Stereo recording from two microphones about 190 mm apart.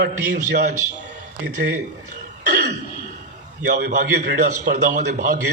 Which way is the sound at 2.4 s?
60° right (ahead or behind).